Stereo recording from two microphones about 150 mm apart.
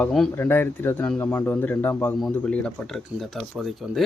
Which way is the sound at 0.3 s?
15° left (ahead or behind).